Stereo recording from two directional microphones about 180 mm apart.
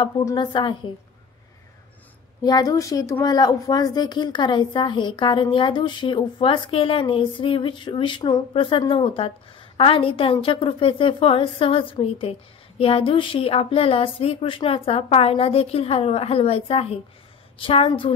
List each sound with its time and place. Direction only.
0.2 s a woman's voice: 20° left (ahead or behind)
2.4 s a woman's voice: 20° left (ahead or behind)